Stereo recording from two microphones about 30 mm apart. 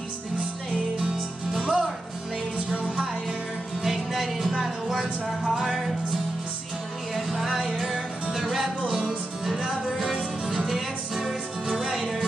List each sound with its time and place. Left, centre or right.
1.6 s music: right
3.8 s music: centre
5.6 s music: centre
7.2 s music: centre
8.8 s music: centre
11.8 s music: centre